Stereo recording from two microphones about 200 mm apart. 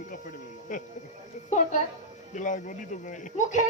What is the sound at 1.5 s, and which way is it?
A man's voice, 40° left (ahead or behind).